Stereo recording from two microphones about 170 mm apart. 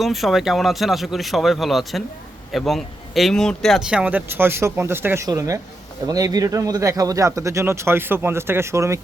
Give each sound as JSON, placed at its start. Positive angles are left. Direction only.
{"t": 0.0, "sound": "speech", "side_deg": 0}